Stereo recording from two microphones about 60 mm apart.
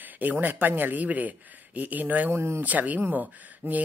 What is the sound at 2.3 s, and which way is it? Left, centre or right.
Speech, right.